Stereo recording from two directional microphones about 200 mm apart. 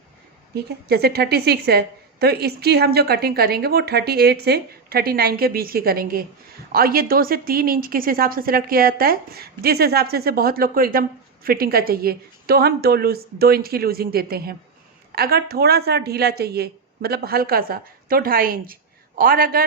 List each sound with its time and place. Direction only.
0.5 s a woman's voice: 55° right (ahead or behind)